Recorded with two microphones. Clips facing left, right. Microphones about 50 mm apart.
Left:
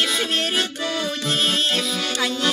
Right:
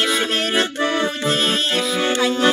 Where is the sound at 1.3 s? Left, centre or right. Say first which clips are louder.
Even; centre.